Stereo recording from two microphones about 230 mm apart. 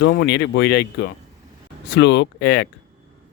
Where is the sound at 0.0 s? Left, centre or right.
Left.